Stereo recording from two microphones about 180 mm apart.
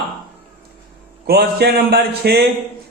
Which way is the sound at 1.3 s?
60° right (ahead or behind).